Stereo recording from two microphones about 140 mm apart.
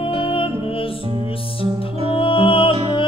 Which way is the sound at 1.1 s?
40° right (ahead or behind).